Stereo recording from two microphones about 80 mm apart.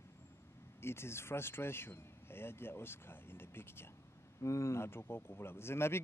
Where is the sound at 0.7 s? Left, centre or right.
Left.